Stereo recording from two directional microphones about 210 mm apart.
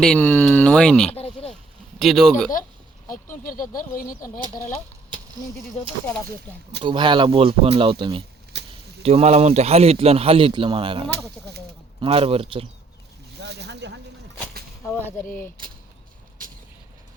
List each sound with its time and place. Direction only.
0.0 s speech: 5° left (ahead or behind)
1.1 s a sound: 30° left (ahead or behind)
2.0 s speech: centre (ahead or behind)
3.8 s speech: 45° left (ahead or behind)
6.8 s speech: 20° right (ahead or behind)
8.5 s a sound: 55° right (ahead or behind)
9.0 s speech: 30° right (ahead or behind)
13.4 s speech: 55° right (ahead or behind)
14.8 s speech: 10° left (ahead or behind)